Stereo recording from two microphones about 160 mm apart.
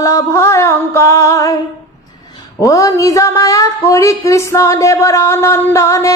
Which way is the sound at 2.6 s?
20° left (ahead or behind).